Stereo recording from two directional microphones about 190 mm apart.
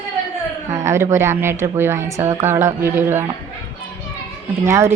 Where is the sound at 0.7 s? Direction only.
15° right (ahead or behind).